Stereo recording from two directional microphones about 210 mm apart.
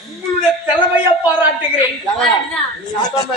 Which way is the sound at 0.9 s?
10° right (ahead or behind).